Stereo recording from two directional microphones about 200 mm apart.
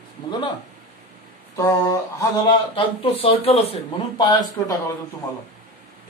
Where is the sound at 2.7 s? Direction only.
25° left (ahead or behind).